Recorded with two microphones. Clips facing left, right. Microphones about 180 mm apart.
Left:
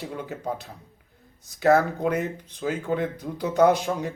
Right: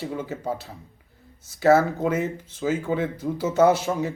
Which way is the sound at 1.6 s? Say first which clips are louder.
Right 2 dB; centre (ahead or behind).